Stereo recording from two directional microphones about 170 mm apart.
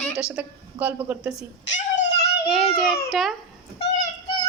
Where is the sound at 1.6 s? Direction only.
90° left.